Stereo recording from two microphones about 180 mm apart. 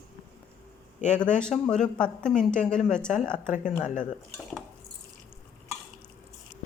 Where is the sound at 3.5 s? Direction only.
45° left (ahead or behind).